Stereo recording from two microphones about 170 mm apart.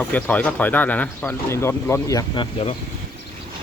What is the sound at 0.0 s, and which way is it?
Speech, 10° left (ahead or behind).